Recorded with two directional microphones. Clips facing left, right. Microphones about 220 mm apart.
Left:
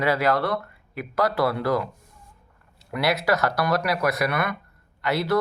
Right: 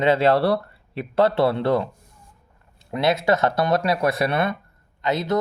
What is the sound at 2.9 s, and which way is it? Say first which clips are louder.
Speech: right 3 dB; 25° right (ahead or behind).